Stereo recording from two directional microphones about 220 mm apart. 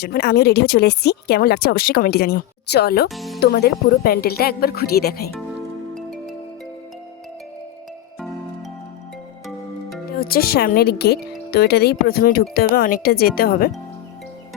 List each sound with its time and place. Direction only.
0.0 s speech: 45° left (ahead or behind)
3.1 s music: centre (ahead or behind)
3.4 s speech: 45° left (ahead or behind)
5.9 s music: 5° left (ahead or behind)
10.2 s speech: 45° left (ahead or behind)